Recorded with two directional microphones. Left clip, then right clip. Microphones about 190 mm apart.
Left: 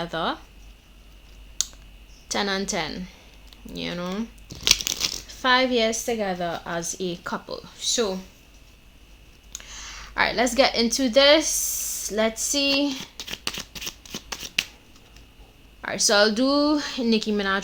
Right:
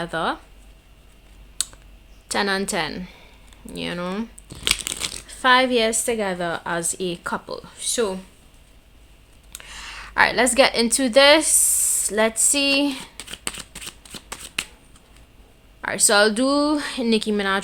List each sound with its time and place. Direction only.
0.0 s speech: 25° right (ahead or behind)
1.6 s clicking: 30° right (ahead or behind)
2.2 s a woman's voice: 30° right (ahead or behind)
4.6 s a sound: 15° right (ahead or behind)
5.3 s a woman's voice: 30° right (ahead or behind)
9.5 s a woman's voice: 30° right (ahead or behind)
13.0 s shuffling cards: 20° right (ahead or behind)
15.8 s speech: 30° right (ahead or behind)